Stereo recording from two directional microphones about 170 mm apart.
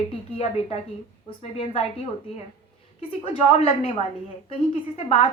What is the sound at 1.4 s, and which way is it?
Speech, 35° left (ahead or behind).